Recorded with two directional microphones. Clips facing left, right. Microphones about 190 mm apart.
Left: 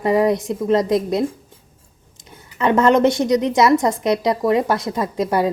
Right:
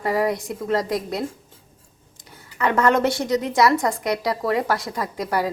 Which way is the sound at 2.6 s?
20° left (ahead or behind).